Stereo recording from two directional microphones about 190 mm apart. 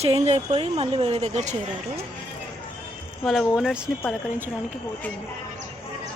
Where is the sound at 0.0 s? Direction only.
35° right (ahead or behind).